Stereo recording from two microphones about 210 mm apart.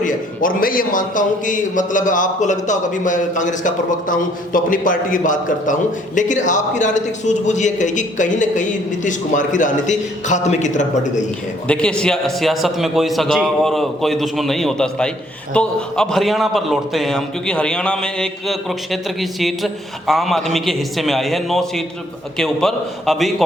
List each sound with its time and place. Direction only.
0.0 s a man's voice: 40° left (ahead or behind)
11.7 s a man's voice: 5° left (ahead or behind)